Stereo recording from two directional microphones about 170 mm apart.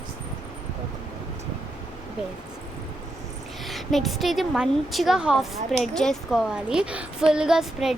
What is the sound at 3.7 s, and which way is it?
A woman's voice, centre (ahead or behind).